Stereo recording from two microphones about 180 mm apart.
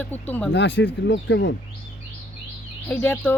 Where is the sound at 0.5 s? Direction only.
80° left.